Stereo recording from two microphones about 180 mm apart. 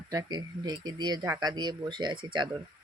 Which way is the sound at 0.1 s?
20° right (ahead or behind).